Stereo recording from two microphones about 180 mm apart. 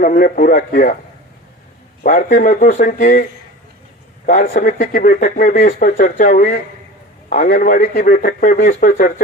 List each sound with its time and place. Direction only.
0.0 s speech: 50° left (ahead or behind)
2.0 s speech: 50° left (ahead or behind)
4.3 s speech: 50° left (ahead or behind)